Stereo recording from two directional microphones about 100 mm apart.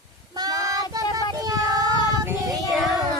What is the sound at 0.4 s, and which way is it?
Child singing, 40° right (ahead or behind).